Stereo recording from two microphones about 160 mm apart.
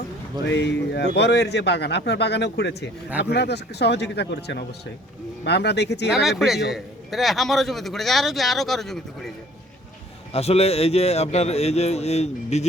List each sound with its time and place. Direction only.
0.5 s speech: 90° left
6.1 s a man's voice: centre (ahead or behind)
10.3 s a man's voice: 40° left (ahead or behind)